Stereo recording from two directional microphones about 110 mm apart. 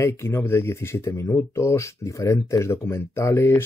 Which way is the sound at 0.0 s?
25° left (ahead or behind).